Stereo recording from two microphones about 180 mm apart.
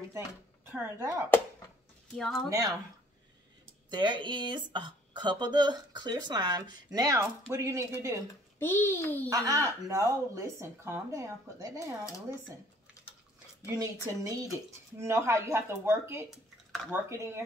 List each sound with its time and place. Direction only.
0.7 s speech: 10° right (ahead or behind)
2.1 s speech: centre (ahead or behind)
3.9 s speech: 25° right (ahead or behind)
8.5 s a child's voice: 10° left (ahead or behind)
9.3 s speech: 20° right (ahead or behind)
13.7 s speech: 20° right (ahead or behind)
16.3 s a sound: centre (ahead or behind)
17.1 s speech: 15° right (ahead or behind)